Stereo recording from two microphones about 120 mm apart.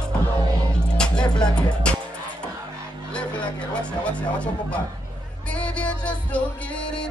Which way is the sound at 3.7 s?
10° left (ahead or behind).